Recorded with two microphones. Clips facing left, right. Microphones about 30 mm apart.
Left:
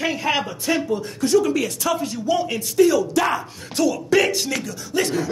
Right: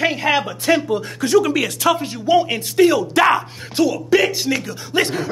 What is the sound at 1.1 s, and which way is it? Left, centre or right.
Speech, right.